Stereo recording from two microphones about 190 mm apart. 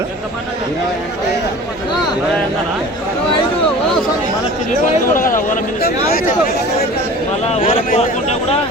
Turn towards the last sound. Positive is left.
turn(degrees=30)  # may be behind; listen again after turning